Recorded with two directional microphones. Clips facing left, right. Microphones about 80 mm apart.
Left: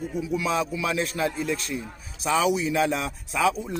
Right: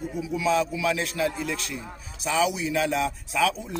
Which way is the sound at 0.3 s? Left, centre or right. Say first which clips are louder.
Right 3 dB; left.